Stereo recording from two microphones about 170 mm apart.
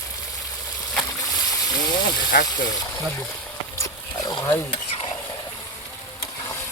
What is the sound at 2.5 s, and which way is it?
Speech, 25° left (ahead or behind).